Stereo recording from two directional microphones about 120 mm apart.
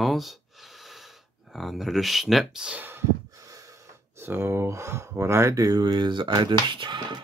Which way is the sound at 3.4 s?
30° right (ahead or behind).